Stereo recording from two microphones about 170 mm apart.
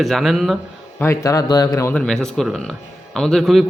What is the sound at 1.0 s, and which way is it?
Speech, 15° left (ahead or behind).